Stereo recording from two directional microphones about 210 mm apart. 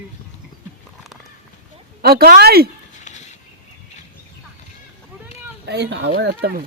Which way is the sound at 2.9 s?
35° left (ahead or behind).